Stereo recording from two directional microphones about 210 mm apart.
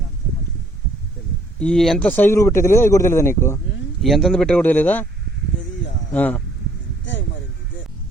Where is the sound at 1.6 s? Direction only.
5° left (ahead or behind).